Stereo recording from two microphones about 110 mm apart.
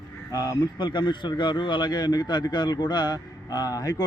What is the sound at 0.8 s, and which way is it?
Speech, 45° left (ahead or behind).